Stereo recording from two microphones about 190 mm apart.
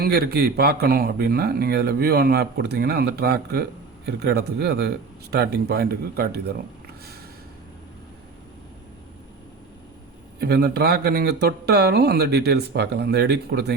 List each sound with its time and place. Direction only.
0.0 s speech: 55° right (ahead or behind)
10.4 s speech: 60° right (ahead or behind)